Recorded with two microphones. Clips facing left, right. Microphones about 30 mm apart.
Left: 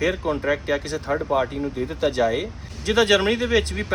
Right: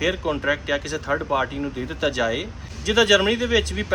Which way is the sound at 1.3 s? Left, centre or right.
Right.